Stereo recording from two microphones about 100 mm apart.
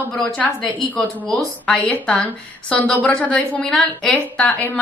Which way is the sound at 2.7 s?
15° left (ahead or behind).